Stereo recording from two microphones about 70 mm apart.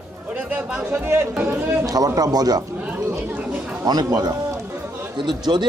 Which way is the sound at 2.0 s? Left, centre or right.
Right.